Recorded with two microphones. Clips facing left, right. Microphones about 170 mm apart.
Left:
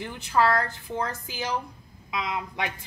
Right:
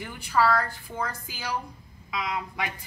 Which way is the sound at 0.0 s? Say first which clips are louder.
Left 1 dB; 20° left (ahead or behind).